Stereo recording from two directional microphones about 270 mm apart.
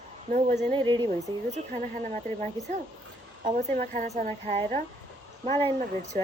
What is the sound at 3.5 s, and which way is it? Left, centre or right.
A woman's voice, right.